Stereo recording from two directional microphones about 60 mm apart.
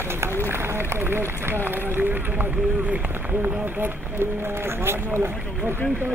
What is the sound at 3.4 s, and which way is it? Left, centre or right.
Speech, right.